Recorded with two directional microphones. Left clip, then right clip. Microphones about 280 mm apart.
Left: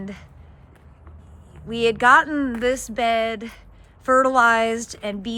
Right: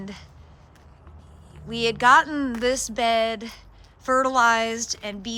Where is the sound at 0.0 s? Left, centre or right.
Centre.